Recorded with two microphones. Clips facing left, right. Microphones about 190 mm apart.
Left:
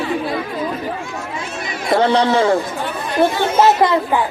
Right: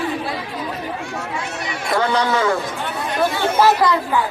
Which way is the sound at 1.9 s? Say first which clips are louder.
Left 5 dB; 30° left (ahead or behind).